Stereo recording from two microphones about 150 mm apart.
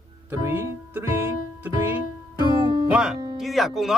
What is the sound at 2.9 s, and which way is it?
Speech, 5° right (ahead or behind).